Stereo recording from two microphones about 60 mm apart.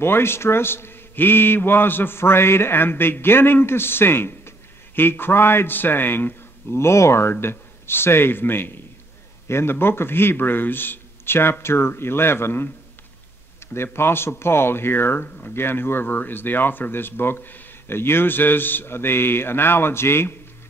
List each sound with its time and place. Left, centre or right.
0.0 s a man's voice: left
13.9 s a man's voice: left